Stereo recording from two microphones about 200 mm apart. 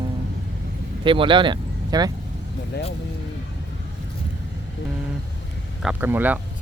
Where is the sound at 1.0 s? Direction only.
25° right (ahead or behind).